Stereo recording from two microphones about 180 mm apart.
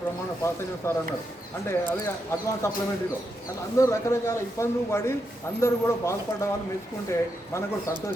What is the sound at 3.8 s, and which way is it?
A man's voice, 15° left (ahead or behind).